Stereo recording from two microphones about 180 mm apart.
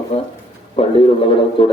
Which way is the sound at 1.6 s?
30° left (ahead or behind).